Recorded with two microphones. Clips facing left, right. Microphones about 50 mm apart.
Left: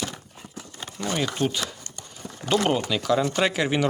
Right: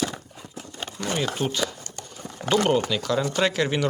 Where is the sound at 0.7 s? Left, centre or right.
Right.